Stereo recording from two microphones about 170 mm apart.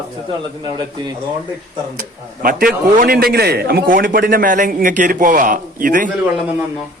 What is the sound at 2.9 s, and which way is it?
Speech, 60° right (ahead or behind).